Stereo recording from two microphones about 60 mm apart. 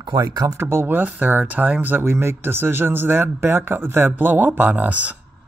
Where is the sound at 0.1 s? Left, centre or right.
Right.